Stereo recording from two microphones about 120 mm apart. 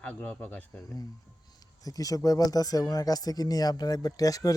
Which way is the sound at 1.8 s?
30° left (ahead or behind).